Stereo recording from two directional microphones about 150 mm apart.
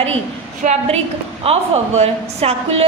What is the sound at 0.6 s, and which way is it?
Speech, 55° right (ahead or behind).